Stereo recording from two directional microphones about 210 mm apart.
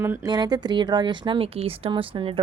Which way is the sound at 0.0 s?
15° right (ahead or behind).